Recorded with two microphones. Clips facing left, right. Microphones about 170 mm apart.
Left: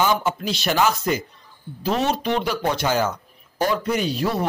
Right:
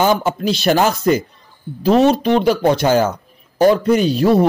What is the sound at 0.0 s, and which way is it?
Speech, 35° right (ahead or behind).